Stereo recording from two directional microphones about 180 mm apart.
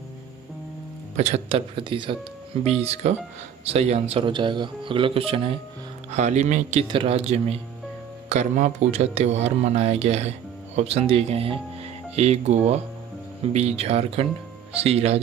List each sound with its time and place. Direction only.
1.1 s speech: 35° right (ahead or behind)